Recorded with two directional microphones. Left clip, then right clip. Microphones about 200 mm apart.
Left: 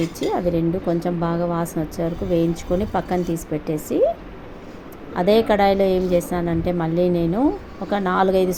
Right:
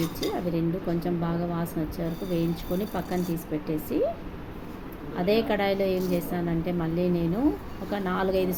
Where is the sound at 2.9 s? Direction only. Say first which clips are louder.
Left 8 dB; 35° left (ahead or behind).